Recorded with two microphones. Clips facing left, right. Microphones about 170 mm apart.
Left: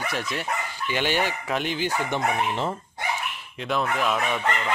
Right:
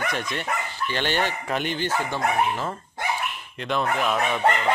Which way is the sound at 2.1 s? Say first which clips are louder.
Right 1 dB; 20° left (ahead or behind).